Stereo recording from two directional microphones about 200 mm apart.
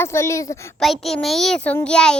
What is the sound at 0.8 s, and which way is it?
A child's voice, centre (ahead or behind).